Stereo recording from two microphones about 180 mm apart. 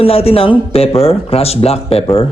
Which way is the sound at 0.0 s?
35° left (ahead or behind).